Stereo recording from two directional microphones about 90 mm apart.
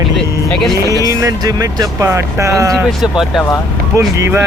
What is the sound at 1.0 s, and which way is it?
Speech, 40° right (ahead or behind).